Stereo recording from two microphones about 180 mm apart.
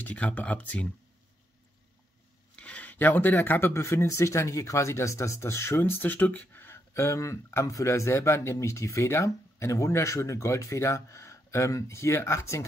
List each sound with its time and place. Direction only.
0.0 s speech: 10° left (ahead or behind)
2.5 s speech: 5° left (ahead or behind)